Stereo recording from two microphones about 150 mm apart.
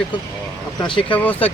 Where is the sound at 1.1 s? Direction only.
10° left (ahead or behind).